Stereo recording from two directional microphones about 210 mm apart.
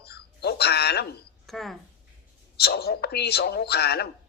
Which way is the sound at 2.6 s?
50° left (ahead or behind).